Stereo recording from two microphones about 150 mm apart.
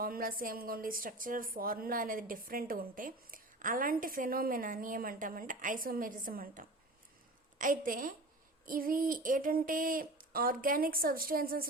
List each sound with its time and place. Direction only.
0.0 s a woman's voice: 75° right (ahead or behind)